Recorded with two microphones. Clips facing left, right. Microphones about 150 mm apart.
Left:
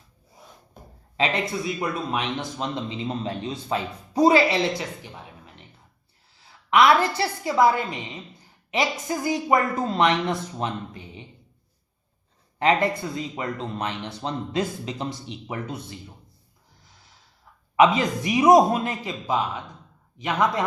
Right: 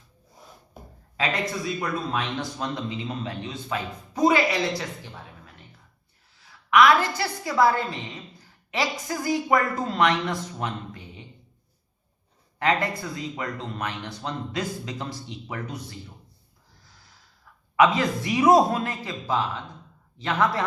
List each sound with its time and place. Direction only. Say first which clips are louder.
1.1 s a man's voice: left 2 dB; 20° left (ahead or behind)
6.4 s a woman's voice: even; 30° left (ahead or behind)
12.5 s a man's voice: left 3 dB; 20° left (ahead or behind)
17.7 s a man's voice: left 2 dB; 20° left (ahead or behind)